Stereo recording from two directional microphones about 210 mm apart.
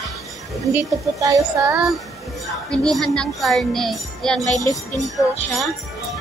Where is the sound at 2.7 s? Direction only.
Centre (ahead or behind).